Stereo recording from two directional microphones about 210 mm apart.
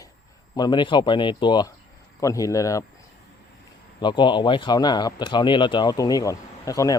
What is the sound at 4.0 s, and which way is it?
Speech, 20° left (ahead or behind).